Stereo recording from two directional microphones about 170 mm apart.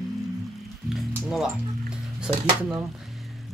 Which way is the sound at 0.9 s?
Centre (ahead or behind).